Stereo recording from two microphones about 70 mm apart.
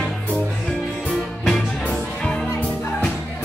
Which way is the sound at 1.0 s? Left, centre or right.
Centre.